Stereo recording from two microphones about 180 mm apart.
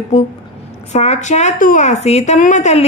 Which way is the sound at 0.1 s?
40° left (ahead or behind).